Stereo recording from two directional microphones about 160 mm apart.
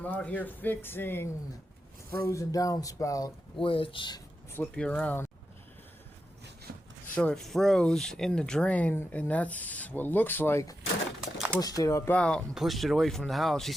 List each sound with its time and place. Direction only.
0.0 s speech: 10° left (ahead or behind)
3.7 s speech: 35° left (ahead or behind)
4.5 s speech: 5° left (ahead or behind)
6.7 s a sound: 90° right
7.2 s speech: 5° left (ahead or behind)
11.2 s a sound: 5° right (ahead or behind)
11.6 s speech: 20° left (ahead or behind); by 13.7 s centre (ahead or behind)